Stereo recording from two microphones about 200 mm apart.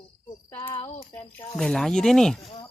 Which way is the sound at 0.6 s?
25° left (ahead or behind).